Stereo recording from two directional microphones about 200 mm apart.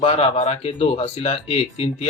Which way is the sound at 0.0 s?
30° left (ahead or behind).